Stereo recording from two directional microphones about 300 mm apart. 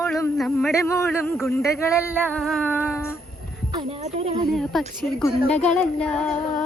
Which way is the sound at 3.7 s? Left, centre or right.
Centre.